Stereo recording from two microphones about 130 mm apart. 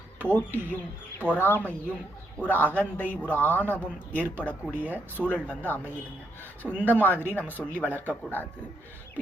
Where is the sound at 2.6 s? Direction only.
15° right (ahead or behind).